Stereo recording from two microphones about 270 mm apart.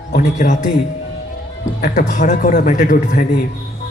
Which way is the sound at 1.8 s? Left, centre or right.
Left.